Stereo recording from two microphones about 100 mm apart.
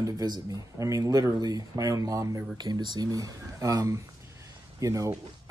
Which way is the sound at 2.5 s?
45° right (ahead or behind).